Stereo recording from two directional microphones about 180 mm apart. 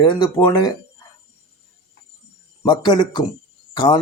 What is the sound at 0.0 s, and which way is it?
Speech, 25° left (ahead or behind).